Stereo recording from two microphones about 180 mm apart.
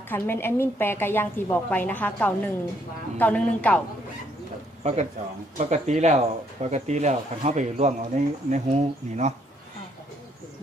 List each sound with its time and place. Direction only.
0.1 s a woman's voice: 10° left (ahead or behind)
4.8 s a man's voice: 40° right (ahead or behind)